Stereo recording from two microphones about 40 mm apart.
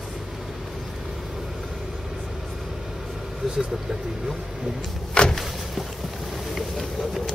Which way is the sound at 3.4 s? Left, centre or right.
Centre.